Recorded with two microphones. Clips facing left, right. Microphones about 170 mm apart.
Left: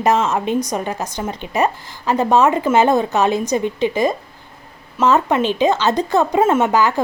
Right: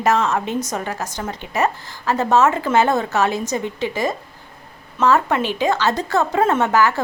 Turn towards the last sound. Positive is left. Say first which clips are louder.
# left 2 dB
turn(degrees=15)  # may be behind; listen again after turning